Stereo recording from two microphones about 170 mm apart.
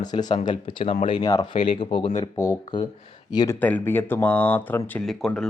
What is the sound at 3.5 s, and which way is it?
Speech, 10° left (ahead or behind).